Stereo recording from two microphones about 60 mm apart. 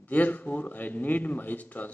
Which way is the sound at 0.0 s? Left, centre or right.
Left.